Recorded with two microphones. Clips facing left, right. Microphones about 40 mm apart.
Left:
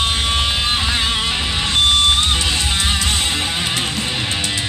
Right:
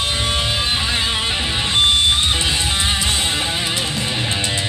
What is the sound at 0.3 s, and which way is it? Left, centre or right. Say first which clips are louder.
Music: left 2 dB; left.